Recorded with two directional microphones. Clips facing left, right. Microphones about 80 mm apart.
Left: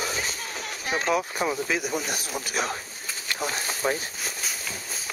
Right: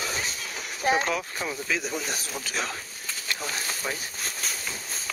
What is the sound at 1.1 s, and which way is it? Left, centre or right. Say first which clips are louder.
Speech: left 5 dB; centre.